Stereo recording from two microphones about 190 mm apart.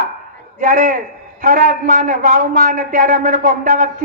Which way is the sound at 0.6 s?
45° right (ahead or behind).